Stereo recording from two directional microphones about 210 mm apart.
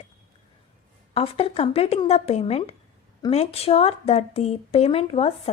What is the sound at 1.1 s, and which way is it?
Speech, 30° left (ahead or behind).